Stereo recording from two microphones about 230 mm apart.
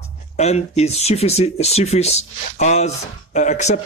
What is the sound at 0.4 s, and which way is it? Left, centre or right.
Speech, left.